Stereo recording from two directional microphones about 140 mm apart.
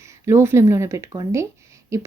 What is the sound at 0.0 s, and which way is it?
Speech, 20° right (ahead or behind).